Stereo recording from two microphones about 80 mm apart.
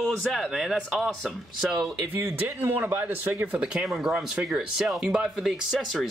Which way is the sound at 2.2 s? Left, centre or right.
Right.